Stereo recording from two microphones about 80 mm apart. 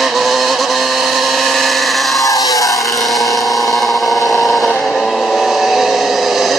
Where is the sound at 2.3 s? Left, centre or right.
Left.